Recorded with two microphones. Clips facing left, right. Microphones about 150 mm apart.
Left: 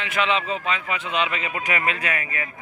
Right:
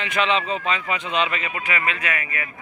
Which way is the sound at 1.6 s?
40° left (ahead or behind).